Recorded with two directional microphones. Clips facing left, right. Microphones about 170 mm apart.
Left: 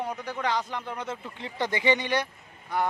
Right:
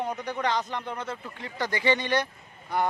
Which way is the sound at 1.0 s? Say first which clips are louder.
Even; 15° left (ahead or behind).